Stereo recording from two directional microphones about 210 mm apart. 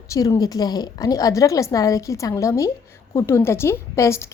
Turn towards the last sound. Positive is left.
turn(degrees=15)  # may be behind; listen again after turning